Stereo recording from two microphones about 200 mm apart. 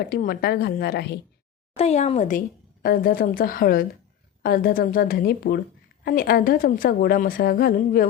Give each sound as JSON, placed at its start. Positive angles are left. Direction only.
{"t": 0.1, "sound": "a woman's voice", "side_deg": 50}
{"t": 1.7, "sound": "a woman's voice", "side_deg": 35}